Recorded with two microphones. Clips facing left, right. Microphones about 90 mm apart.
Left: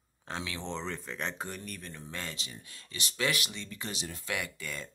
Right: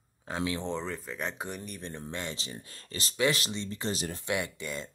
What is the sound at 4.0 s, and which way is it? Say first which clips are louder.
Speech: right 5 dB; 40° right (ahead or behind).